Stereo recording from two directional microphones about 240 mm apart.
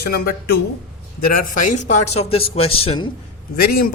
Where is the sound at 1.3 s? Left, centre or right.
Left.